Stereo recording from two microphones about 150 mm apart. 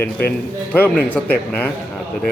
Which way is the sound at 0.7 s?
10° left (ahead or behind).